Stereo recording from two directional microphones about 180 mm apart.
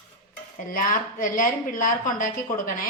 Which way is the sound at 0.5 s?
50° left (ahead or behind).